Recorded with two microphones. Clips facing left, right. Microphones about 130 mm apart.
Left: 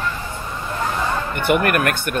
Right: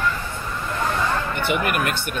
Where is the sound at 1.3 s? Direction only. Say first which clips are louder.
Left 5 dB; 50° left (ahead or behind).